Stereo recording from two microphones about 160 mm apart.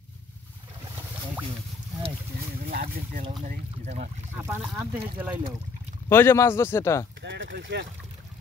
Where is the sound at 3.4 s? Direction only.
50° right (ahead or behind).